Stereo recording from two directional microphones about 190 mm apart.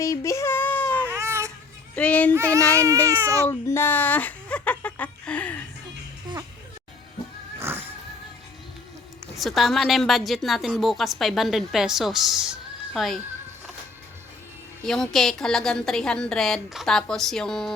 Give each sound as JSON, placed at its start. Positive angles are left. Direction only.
{"t": 0.0, "sound": "a sound", "side_deg": 15}
{"t": 1.0, "sound": "baby cry", "side_deg": -15}
{"t": 2.0, "sound": "music", "side_deg": 5}
{"t": 2.3, "sound": "child singing", "side_deg": -15}
{"t": 3.1, "sound": "speech", "side_deg": -15}
{"t": 3.4, "sound": "a sound", "side_deg": 15}
{"t": 7.6, "sound": "music", "side_deg": -10}
{"t": 9.3, "sound": "a woman's voice", "side_deg": 0}
{"t": 14.8, "sound": "a woman's voice", "side_deg": 5}